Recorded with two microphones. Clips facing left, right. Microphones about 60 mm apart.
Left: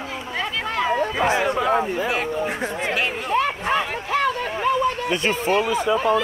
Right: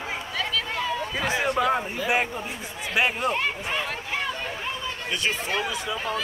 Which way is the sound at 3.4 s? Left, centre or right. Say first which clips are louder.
Left 6 dB; left.